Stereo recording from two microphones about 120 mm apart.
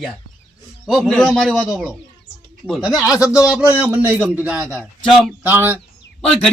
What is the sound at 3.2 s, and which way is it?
Speech, 25° left (ahead or behind).